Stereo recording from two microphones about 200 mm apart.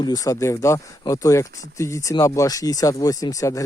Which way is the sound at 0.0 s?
20° left (ahead or behind).